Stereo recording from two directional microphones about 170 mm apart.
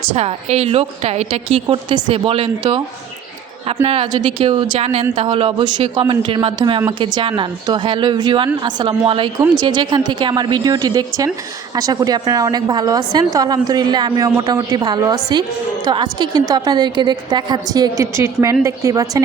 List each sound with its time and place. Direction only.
0.1 s a man's voice: 40° right (ahead or behind)
3.8 s a man's voice: 35° right (ahead or behind)